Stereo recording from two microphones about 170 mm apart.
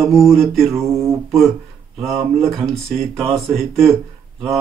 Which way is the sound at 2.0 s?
Centre (ahead or behind).